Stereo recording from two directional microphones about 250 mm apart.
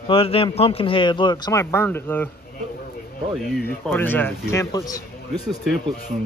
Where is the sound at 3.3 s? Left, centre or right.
Centre.